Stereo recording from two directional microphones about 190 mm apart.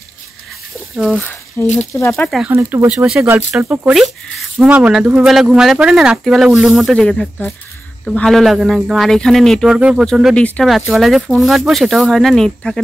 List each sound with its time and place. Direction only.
0.9 s speech: centre (ahead or behind)
2.2 s speech: centre (ahead or behind)
2.5 s speech: 10° right (ahead or behind)